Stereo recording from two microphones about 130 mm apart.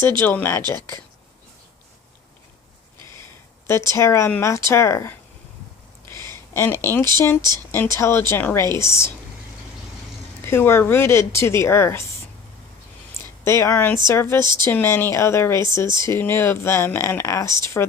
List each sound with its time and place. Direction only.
0.2 s speech: 15° left (ahead or behind)
3.7 s speech: 20° left (ahead or behind)
10.4 s speech: 20° left (ahead or behind)
13.4 s speech: 20° left (ahead or behind)